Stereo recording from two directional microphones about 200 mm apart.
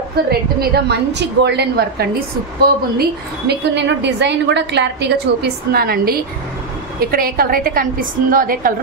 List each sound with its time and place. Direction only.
0.3 s a woman's voice: 55° right (ahead or behind)